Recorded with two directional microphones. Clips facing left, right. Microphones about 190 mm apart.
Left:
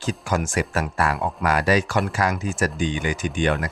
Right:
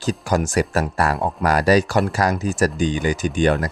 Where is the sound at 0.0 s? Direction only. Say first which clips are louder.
Right 4 dB; 40° right (ahead or behind).